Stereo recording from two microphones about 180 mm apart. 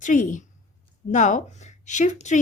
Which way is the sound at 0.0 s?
45° left (ahead or behind).